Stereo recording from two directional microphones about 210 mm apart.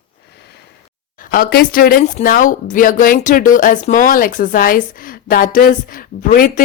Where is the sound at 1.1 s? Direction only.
45° left (ahead or behind).